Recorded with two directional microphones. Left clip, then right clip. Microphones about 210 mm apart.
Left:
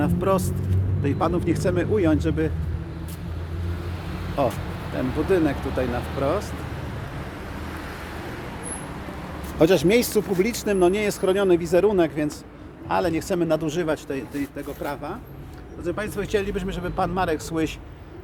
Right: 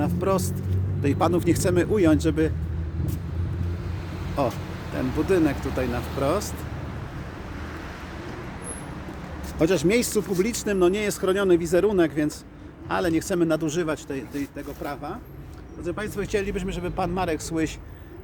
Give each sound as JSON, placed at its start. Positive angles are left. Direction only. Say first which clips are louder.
{"t": 0.0, "sound": "speech", "louder": "left 2 dB", "side_deg": -20}
{"t": 1.0, "sound": "speech", "louder": "right 1 dB", "side_deg": -45}
{"t": 4.4, "sound": "speech", "louder": "left 2 dB", "side_deg": -20}
{"t": 6.1, "sound": "speech", "louder": "even", "side_deg": -45}
{"t": 9.6, "sound": "speech", "louder": "left 4 dB", "side_deg": 10}